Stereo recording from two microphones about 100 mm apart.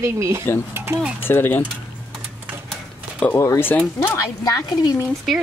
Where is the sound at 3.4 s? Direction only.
30° left (ahead or behind).